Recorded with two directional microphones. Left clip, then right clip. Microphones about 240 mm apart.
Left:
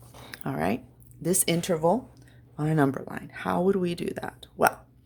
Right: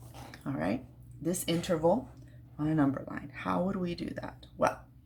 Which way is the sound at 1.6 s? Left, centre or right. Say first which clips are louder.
Left 1 dB; left.